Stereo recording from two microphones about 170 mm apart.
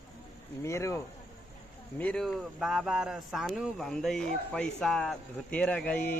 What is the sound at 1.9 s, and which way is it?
Speech, 5° left (ahead or behind).